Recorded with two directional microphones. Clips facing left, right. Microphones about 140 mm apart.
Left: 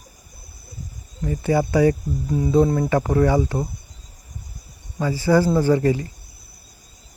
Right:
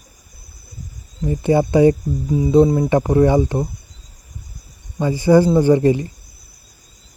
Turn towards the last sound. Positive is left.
turn(degrees=-20)  # may be behind; listen again after turning